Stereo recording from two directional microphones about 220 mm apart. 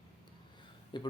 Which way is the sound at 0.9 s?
20° left (ahead or behind).